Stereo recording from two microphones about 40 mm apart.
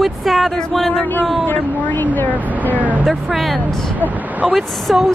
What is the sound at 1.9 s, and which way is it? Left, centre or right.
Speech, left.